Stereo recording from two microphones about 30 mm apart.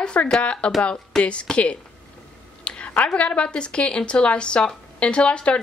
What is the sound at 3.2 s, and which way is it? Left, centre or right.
Speech, left.